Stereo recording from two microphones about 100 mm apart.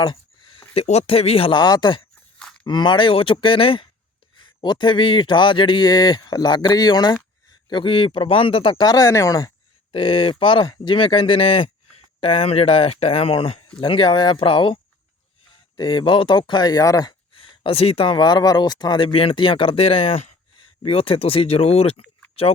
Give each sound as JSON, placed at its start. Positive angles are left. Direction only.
{"t": 0.0, "sound": "speech", "side_deg": 50}
{"t": 1.5, "sound": "speech", "side_deg": 45}
{"t": 7.7, "sound": "speech", "side_deg": 55}
{"t": 8.8, "sound": "speech", "side_deg": 35}
{"t": 9.9, "sound": "speech", "side_deg": 65}
{"t": 13.7, "sound": "speech", "side_deg": 60}
{"t": 17.3, "sound": "speech", "side_deg": 60}
{"t": 20.8, "sound": "speech", "side_deg": 70}